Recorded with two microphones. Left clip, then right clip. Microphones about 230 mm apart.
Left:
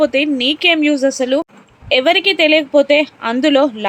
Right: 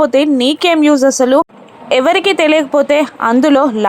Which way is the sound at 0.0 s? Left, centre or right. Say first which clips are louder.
Right 3 dB; centre.